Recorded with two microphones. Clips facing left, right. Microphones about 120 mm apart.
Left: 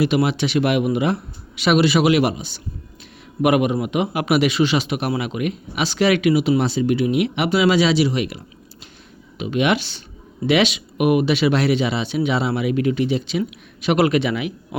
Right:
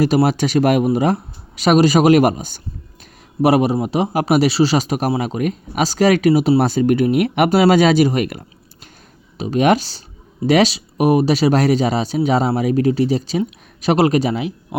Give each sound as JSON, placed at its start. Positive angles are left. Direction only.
{"t": 0.0, "sound": "speech", "side_deg": -40}
{"t": 3.4, "sound": "speech", "side_deg": -35}
{"t": 9.4, "sound": "speech", "side_deg": -40}